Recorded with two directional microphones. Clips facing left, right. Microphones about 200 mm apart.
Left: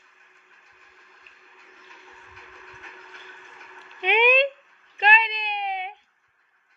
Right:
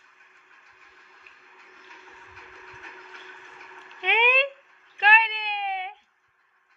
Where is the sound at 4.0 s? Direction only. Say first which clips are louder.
Left 5 dB; 15° left (ahead or behind).